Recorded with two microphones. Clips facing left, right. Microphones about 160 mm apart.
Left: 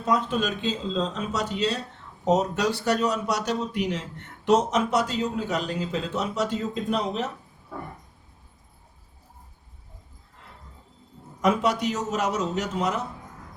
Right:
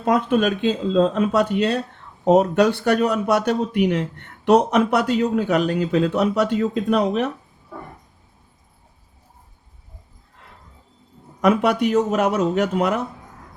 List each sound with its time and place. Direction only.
0.0 s a man's voice: 60° right (ahead or behind)
11.3 s a man's voice: 60° right (ahead or behind)